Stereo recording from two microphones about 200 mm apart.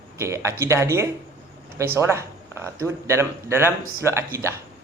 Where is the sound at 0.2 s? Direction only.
15° right (ahead or behind).